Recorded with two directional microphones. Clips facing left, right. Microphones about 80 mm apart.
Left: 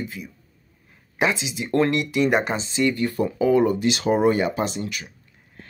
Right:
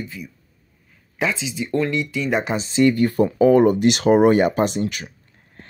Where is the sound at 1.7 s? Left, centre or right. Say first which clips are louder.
Left 2 dB; left.